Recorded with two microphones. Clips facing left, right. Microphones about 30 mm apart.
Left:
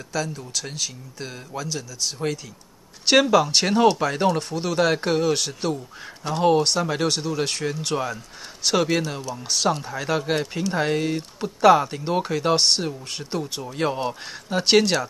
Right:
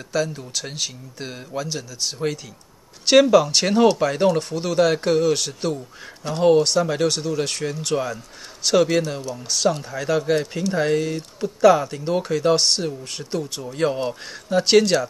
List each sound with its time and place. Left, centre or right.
0.1 s speech: centre